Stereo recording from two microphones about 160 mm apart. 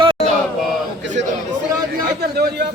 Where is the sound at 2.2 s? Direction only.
90° right.